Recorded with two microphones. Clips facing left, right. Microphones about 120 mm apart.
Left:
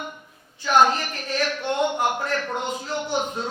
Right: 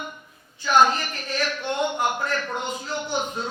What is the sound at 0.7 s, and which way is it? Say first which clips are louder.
A woman's voice: even; 60° left (ahead or behind).